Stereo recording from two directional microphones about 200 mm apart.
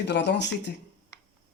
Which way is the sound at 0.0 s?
60° left (ahead or behind).